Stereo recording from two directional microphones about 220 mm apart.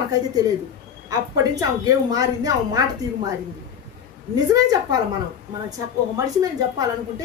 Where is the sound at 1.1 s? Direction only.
15° right (ahead or behind).